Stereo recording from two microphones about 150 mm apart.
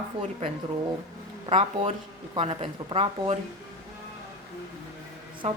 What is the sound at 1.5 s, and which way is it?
Speech, 40° right (ahead or behind).